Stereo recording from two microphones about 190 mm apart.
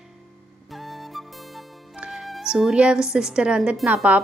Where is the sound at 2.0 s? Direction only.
5° right (ahead or behind).